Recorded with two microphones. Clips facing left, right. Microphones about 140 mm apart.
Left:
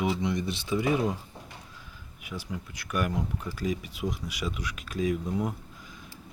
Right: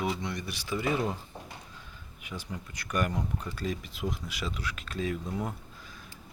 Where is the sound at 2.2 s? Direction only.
5° left (ahead or behind).